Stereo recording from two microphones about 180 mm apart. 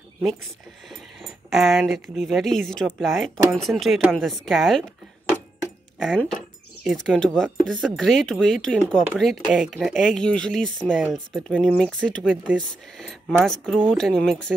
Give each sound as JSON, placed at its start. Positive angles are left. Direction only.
{"t": 0.8, "sound": "speech", "side_deg": 0}
{"t": 5.9, "sound": "speech", "side_deg": 0}